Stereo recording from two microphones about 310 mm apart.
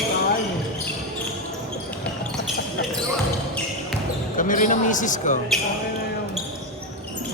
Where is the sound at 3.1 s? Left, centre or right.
Centre.